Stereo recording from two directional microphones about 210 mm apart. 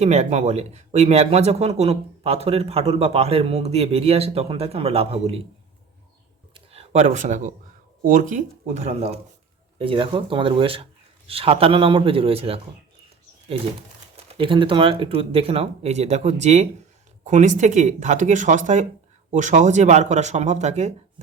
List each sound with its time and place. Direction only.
0.0 s speech: 30° right (ahead or behind)
6.5 s a sound: 30° right (ahead or behind)
8.0 s speech: 40° right (ahead or behind)
14.3 s speech: 25° right (ahead or behind)